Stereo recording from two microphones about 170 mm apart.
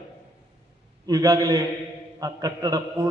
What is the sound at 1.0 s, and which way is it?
A man's voice, 20° right (ahead or behind).